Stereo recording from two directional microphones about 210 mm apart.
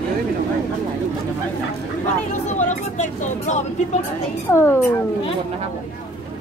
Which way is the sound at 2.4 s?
35° left (ahead or behind).